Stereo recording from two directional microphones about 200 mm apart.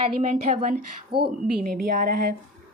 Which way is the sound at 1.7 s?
45° right (ahead or behind).